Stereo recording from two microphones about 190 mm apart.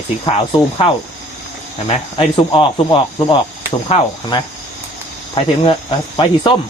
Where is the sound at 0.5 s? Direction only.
25° left (ahead or behind).